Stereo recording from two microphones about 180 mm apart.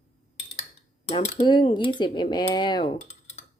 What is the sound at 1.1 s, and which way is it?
Speech, 40° left (ahead or behind).